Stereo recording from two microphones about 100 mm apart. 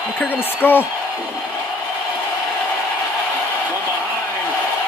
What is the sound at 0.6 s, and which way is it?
Speech, 20° left (ahead or behind).